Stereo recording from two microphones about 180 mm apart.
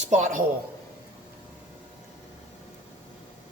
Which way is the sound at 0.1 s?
45° right (ahead or behind).